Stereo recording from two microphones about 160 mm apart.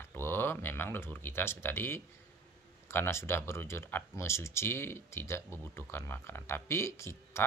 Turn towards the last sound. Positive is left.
turn(degrees=15)  # may be behind; listen again after turning